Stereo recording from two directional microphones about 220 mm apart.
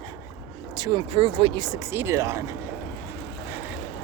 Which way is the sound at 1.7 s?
10° right (ahead or behind).